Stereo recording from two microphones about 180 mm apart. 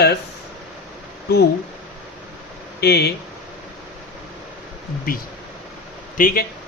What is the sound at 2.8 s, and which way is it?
Speech, 65° left (ahead or behind).